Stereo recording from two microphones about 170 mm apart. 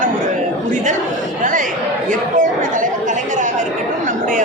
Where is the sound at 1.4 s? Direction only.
50° right (ahead or behind).